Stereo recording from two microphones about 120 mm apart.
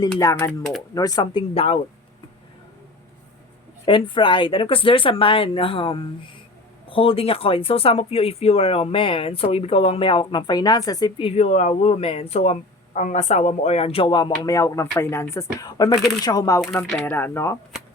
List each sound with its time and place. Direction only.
0.2 s speech: 25° left (ahead or behind); by 1.8 s 55° left (ahead or behind)
3.8 s speech: 45° left (ahead or behind)
11.2 s speech: 60° left (ahead or behind)
14.1 s speech: 35° left (ahead or behind)
17.1 s speech: 20° left (ahead or behind)